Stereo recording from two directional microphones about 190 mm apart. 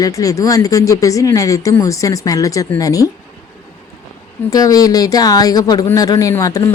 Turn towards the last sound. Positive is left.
turn(degrees=15)  # may be behind; listen again after turning